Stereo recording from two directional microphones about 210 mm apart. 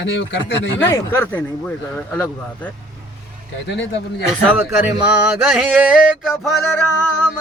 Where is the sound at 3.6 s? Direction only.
55° left (ahead or behind).